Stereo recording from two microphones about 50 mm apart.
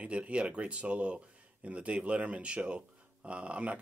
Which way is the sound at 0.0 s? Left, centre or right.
Right.